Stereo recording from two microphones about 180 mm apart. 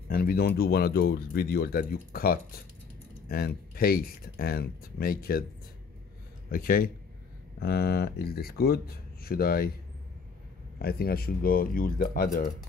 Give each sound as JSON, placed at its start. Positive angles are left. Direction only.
{"t": 0.1, "sound": "speech", "side_deg": 55}
{"t": 6.5, "sound": "a man's voice", "side_deg": 55}
{"t": 10.8, "sound": "speech", "side_deg": 60}